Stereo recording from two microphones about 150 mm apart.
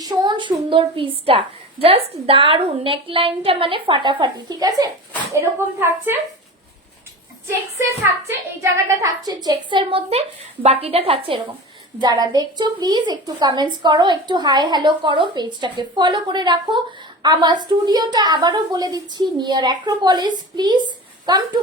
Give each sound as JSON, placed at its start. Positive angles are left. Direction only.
{"t": 0.0, "sound": "a sound", "side_deg": -25}
{"t": 0.7, "sound": "a woman's voice", "side_deg": -35}
{"t": 8.3, "sound": "a woman's voice", "side_deg": -20}
{"t": 12.0, "sound": "a woman's voice", "side_deg": -25}